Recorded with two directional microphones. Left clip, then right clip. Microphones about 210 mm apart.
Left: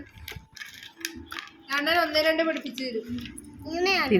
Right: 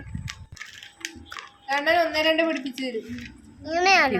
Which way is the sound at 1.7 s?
45° right (ahead or behind).